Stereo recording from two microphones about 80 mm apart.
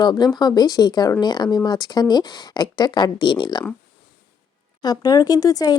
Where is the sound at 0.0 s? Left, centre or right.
Left.